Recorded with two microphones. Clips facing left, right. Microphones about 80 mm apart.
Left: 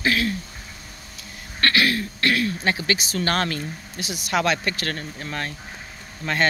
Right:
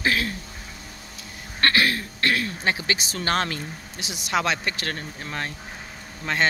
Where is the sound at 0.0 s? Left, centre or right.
Right.